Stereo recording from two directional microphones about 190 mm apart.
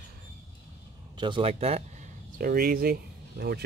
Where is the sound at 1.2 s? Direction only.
25° right (ahead or behind).